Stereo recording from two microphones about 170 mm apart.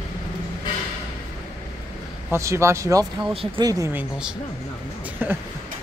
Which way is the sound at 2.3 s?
15° right (ahead or behind).